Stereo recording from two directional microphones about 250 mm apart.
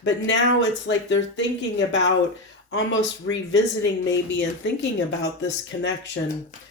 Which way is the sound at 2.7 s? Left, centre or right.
Left.